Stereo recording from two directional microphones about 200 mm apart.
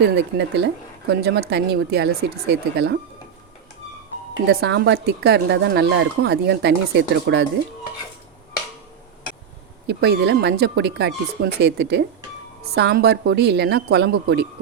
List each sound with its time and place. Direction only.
0.3 s speech: 55° right (ahead or behind)
4.4 s speech: 55° right (ahead or behind)
9.8 s speech: 55° right (ahead or behind)